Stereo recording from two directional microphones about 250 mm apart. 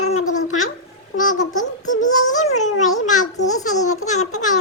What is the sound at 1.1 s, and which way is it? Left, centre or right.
Toothbrush, left.